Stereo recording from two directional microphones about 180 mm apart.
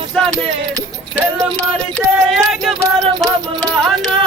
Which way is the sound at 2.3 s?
Centre (ahead or behind).